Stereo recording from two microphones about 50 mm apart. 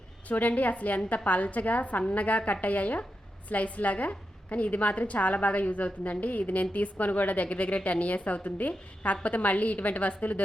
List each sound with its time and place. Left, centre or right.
0.3 s a woman's voice: left